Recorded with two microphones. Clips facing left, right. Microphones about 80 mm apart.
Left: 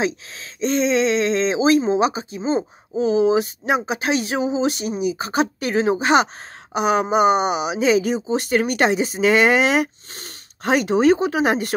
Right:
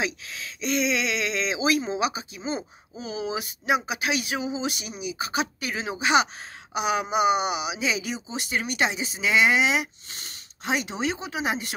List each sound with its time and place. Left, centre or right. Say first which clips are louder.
0.0 s speech: left 6 dB; left